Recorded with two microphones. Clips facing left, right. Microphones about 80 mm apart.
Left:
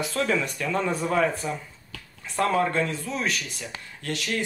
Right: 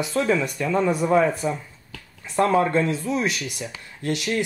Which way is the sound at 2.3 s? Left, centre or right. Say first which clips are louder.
Right 4 dB; centre.